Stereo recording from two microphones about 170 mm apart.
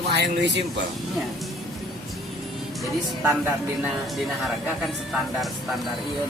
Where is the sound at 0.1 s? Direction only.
85° right.